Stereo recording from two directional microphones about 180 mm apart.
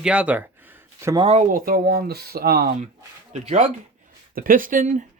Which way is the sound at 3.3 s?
40° right (ahead or behind).